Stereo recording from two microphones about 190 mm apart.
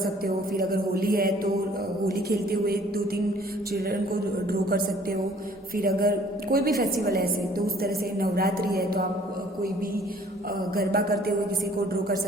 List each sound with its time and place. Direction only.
0.5 s a woman's voice: 50° right (ahead or behind)
5.7 s a woman's voice: 50° right (ahead or behind)
10.8 s a woman's voice: 55° right (ahead or behind)